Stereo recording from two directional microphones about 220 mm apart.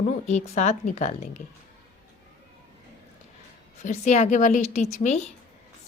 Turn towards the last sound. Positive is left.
turn(degrees=30)  # may be behind; listen again after turning